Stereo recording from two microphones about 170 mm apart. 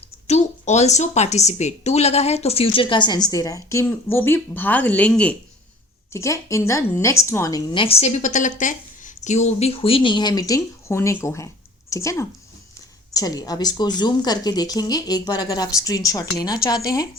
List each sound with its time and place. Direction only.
0.3 s a woman's voice: 40° left (ahead or behind); by 5.4 s 5° left (ahead or behind)
6.1 s speech: 20° left (ahead or behind)